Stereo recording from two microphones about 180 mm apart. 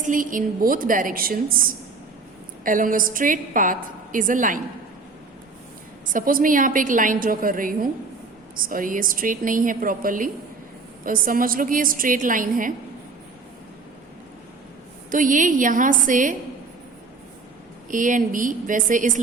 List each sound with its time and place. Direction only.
0.0 s a woman's voice: 45° right (ahead or behind)
6.1 s a woman's voice: 50° right (ahead or behind)
15.1 s a woman's voice: 45° right (ahead or behind)
17.9 s a woman's voice: 45° right (ahead or behind)